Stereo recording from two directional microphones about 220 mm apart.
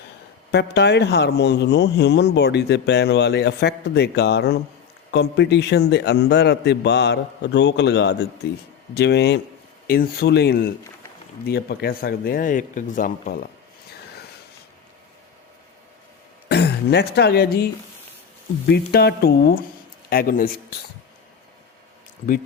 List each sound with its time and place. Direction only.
0.5 s a man's voice: 50° left (ahead or behind)
16.5 s speech: 50° left (ahead or behind)
18.7 s a man's voice: 45° left (ahead or behind)